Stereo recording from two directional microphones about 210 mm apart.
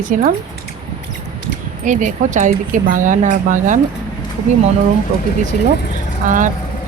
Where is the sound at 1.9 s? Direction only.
35° right (ahead or behind).